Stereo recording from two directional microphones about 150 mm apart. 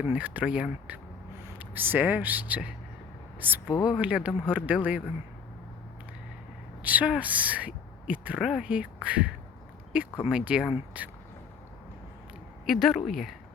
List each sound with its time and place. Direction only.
0.0 s a woman's voice: 10° right (ahead or behind)
3.7 s speech: 25° left (ahead or behind)
4.0 s a woman's voice: 10° right (ahead or behind)
6.8 s a woman's voice: 10° right (ahead or behind)
12.6 s a woman's voice: centre (ahead or behind)